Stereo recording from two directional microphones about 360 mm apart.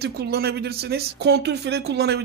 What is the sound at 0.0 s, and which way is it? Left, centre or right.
Speech, right.